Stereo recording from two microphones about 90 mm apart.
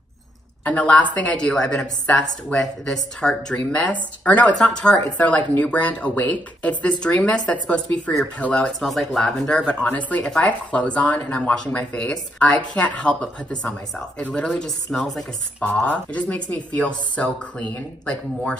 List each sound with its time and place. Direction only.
0.7 s speech: 15° left (ahead or behind)
15.6 s speech: 15° left (ahead or behind)